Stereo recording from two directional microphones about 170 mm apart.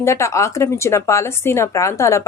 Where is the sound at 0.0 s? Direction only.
15° left (ahead or behind).